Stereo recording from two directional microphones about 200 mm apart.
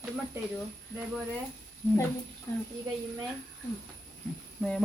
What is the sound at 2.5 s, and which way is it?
Speech, 15° left (ahead or behind).